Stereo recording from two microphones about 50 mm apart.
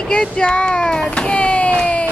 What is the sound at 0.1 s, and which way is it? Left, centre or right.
Speech, centre.